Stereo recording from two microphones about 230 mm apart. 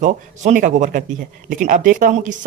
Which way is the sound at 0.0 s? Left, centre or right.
Right.